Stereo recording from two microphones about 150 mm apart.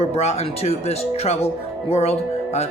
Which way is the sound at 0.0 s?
45° left (ahead or behind).